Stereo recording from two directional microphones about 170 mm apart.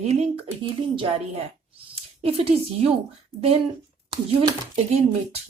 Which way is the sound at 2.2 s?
35° right (ahead or behind).